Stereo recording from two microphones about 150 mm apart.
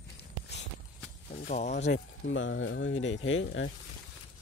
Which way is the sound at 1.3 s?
55° left (ahead or behind).